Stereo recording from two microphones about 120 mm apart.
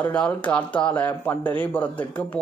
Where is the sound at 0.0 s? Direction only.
15° left (ahead or behind).